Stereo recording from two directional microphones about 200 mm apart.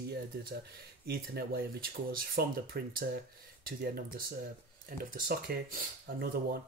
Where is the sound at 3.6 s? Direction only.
45° right (ahead or behind).